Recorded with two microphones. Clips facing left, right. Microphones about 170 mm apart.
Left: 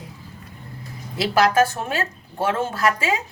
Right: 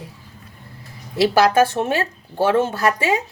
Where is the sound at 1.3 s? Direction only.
25° right (ahead or behind).